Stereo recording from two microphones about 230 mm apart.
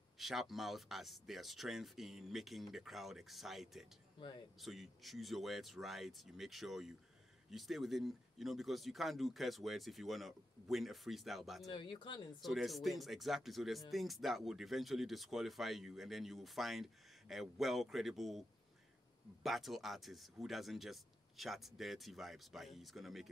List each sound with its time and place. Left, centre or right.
0.2 s speech: centre
11.7 s speech: left
12.4 s speech: centre
19.4 s speech: centre